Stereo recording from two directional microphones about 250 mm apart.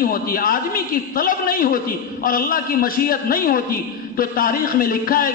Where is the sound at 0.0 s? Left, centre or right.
Left.